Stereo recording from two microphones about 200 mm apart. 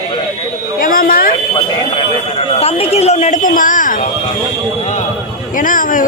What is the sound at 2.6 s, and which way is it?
A woman's voice, 30° left (ahead or behind).